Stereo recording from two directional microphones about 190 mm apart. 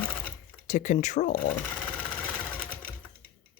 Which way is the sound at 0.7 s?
40° left (ahead or behind).